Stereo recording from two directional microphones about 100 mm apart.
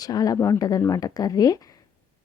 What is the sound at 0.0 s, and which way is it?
A woman's voice, 40° left (ahead or behind).